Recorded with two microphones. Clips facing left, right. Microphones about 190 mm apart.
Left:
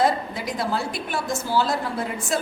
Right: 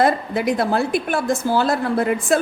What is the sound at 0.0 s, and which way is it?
A woman's voice, 60° right (ahead or behind).